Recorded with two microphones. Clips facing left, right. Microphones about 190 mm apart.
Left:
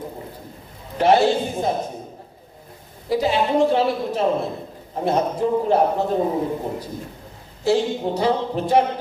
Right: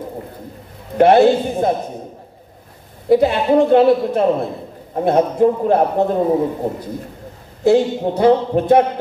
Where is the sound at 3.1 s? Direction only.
55° right (ahead or behind).